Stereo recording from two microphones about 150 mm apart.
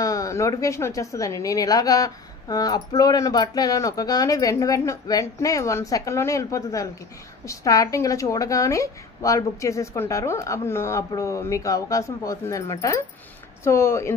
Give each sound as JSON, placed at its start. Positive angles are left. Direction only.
{"t": 0.0, "sound": "a woman's voice", "side_deg": 20}